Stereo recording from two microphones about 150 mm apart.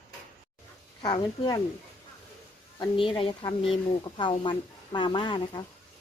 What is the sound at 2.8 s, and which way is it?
Speech, 30° left (ahead or behind).